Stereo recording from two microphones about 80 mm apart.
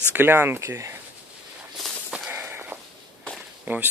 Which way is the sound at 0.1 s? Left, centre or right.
Right.